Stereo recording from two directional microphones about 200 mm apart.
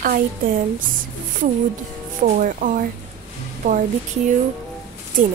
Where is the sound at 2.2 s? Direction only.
40° right (ahead or behind).